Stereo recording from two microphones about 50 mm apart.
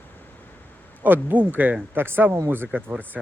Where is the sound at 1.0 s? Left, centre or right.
Right.